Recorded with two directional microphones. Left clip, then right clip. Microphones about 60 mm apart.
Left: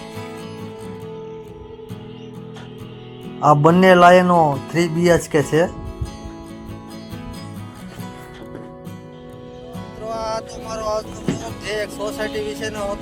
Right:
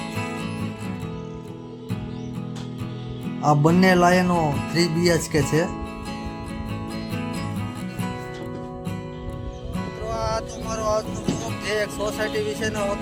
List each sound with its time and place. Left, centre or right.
3.4 s speech: left
9.7 s music: left
12.3 s music: centre